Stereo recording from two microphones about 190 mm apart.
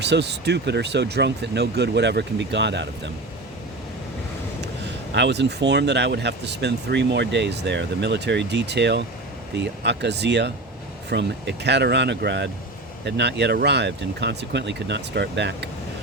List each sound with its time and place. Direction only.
0.0 s speech: 60° right (ahead or behind)
5.1 s speech: 65° right (ahead or behind)